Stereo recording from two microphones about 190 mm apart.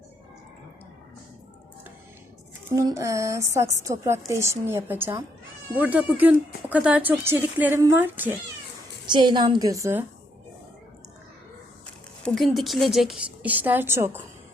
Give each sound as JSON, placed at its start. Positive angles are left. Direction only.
{"t": 2.6, "sound": "speech", "side_deg": -15}
{"t": 9.0, "sound": "a woman's voice", "side_deg": -25}
{"t": 12.2, "sound": "a woman's voice", "side_deg": 0}